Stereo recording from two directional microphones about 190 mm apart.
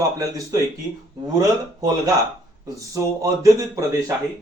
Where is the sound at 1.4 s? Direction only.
20° right (ahead or behind).